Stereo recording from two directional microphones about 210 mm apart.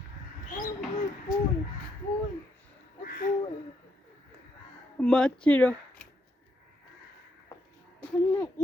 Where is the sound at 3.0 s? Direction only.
40° left (ahead or behind).